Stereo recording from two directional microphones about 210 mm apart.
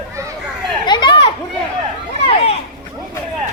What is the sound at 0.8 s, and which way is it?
Children playing, 20° left (ahead or behind).